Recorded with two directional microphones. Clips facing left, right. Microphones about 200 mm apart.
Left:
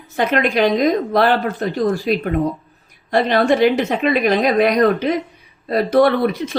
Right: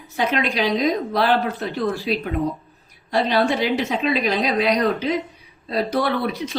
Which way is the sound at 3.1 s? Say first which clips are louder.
Left 4 dB; 60° left (ahead or behind).